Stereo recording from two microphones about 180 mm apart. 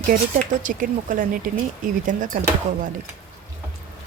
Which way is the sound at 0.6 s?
45° right (ahead or behind).